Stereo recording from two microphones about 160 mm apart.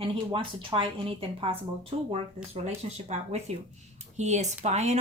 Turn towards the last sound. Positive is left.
turn(degrees=-45)  # may be behind; listen again after turning